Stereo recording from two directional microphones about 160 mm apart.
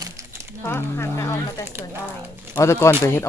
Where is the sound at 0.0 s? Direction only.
20° right (ahead or behind).